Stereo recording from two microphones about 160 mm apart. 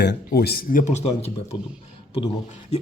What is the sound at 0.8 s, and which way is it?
Speech, 45° left (ahead or behind).